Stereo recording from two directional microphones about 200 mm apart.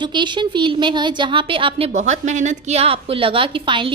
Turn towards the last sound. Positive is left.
turn(degrees=-25)  # may be behind; listen again after turning